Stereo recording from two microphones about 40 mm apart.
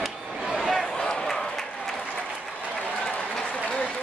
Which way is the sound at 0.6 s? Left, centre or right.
Centre.